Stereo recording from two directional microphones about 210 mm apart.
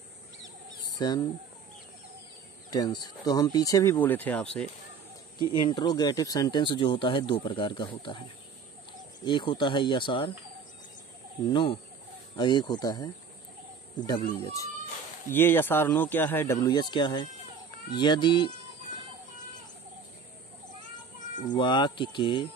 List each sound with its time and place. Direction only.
0.9 s speech: 20° left (ahead or behind)
2.7 s speech: 20° left (ahead or behind)
5.5 s speech: 20° left (ahead or behind)
9.2 s speech: 20° left (ahead or behind)
11.5 s speech: 25° left (ahead or behind)
21.5 s speech: 20° left (ahead or behind)